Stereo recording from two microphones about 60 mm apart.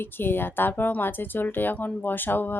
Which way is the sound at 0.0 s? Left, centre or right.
Left.